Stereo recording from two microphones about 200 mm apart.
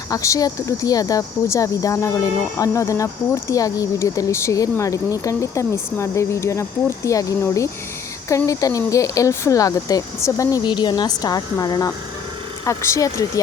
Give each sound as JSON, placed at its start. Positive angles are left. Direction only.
{"t": 0.1, "sound": "speech", "side_deg": 15}